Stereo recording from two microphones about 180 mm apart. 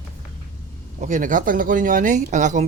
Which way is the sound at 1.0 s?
45° right (ahead or behind).